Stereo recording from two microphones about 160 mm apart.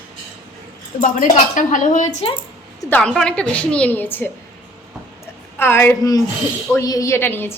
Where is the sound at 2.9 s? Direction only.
5° left (ahead or behind).